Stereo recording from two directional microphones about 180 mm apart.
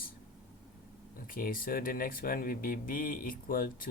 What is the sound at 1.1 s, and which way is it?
Speech, 50° left (ahead or behind).